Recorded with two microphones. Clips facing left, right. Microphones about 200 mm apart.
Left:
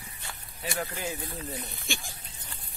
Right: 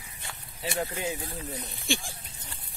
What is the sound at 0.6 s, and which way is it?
Speech, 25° right (ahead or behind).